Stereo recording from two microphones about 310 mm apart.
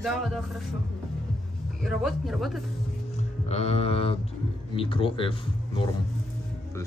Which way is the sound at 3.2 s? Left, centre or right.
Left.